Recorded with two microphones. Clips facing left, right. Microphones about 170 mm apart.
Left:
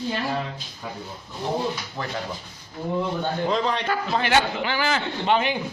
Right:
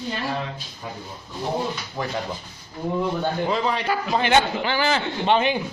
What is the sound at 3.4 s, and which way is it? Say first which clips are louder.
Speech: left 2 dB; 5° right (ahead or behind).